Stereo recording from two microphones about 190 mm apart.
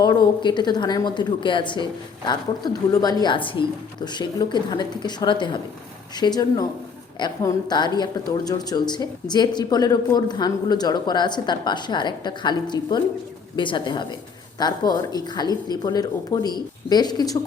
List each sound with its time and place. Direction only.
0.0 s speech: 20° left (ahead or behind)